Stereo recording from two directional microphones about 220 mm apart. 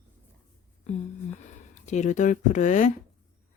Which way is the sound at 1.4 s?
30° left (ahead or behind).